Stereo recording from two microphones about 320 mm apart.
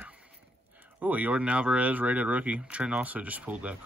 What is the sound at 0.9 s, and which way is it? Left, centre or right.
Speech, centre.